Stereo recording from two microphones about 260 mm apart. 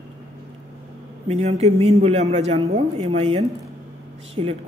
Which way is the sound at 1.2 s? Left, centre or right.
Right.